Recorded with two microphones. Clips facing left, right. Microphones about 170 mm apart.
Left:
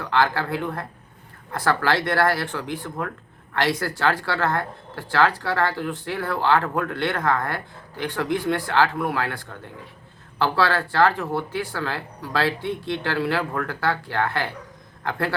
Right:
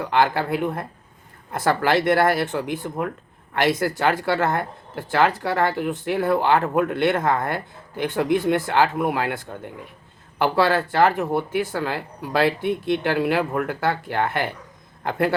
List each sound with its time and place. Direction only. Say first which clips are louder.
0.0 s speech: right 2 dB; 20° right (ahead or behind)